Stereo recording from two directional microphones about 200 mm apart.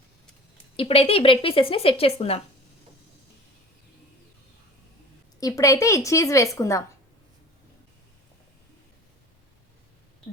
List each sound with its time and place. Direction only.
0.8 s speech: 30° left (ahead or behind)
5.4 s a woman's voice: 15° left (ahead or behind)